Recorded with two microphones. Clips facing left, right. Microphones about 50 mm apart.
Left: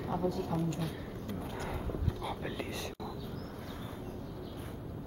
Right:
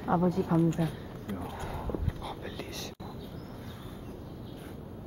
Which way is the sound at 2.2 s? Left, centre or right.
Centre.